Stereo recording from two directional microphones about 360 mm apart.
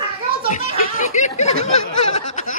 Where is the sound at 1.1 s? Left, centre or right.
Centre.